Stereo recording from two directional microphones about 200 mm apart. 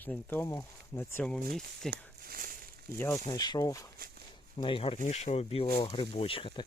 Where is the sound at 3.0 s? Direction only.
15° left (ahead or behind).